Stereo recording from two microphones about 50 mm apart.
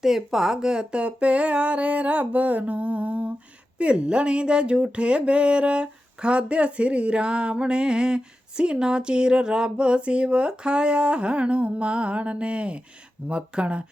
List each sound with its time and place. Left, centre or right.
0.0 s speech: centre